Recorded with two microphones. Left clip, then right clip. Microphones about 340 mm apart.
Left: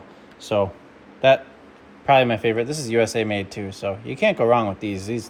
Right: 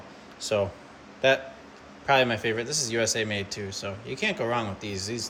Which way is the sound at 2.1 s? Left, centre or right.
Centre.